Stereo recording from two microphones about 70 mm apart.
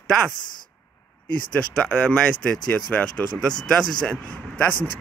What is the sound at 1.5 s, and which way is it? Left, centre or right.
Speech, centre.